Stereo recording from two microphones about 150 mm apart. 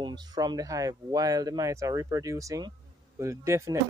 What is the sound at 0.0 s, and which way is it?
Speech, 30° right (ahead or behind).